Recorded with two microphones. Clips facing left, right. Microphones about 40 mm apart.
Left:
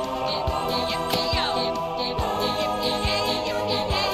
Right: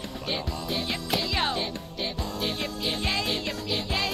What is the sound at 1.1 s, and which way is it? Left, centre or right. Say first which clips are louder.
Music: right 1 dB; centre.